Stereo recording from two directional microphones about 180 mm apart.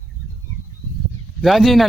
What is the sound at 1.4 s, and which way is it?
Speech, centre (ahead or behind).